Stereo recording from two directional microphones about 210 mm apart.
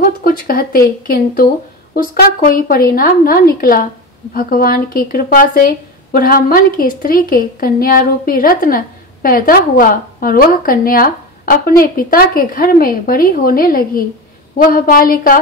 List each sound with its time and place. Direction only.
0.0 s speech: 45° left (ahead or behind)